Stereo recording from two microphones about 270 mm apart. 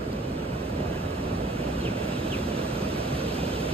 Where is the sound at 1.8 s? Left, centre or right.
Right.